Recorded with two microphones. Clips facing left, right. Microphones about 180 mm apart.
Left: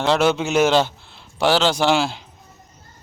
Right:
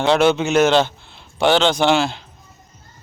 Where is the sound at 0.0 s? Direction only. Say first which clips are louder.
Right 3 dB; 5° left (ahead or behind).